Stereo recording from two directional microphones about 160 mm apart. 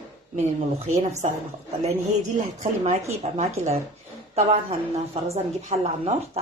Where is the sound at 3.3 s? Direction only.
50° right (ahead or behind).